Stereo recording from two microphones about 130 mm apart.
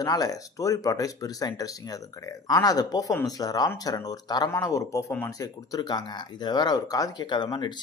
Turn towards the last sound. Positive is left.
turn(degrees=35)  # may be behind; listen again after turning